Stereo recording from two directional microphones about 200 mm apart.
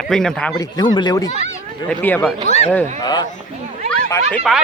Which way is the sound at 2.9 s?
20° left (ahead or behind).